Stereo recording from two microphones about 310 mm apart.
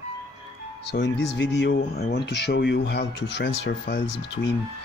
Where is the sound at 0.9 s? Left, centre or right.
Left.